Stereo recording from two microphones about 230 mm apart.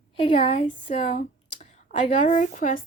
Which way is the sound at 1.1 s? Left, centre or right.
Left.